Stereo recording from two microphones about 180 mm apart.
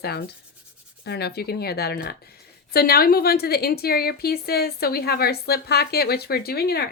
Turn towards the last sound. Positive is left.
turn(degrees=60)  # may be behind; listen again after turning